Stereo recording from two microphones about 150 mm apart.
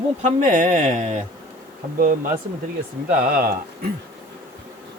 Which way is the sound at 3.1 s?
75° right (ahead or behind).